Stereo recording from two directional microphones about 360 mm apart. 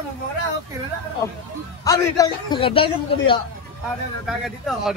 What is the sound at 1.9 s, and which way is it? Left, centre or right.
A man's voice, centre.